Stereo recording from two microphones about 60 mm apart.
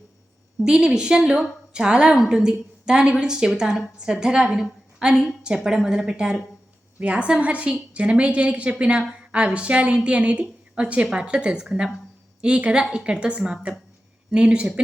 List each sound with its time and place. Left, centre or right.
0.6 s a woman's voice: centre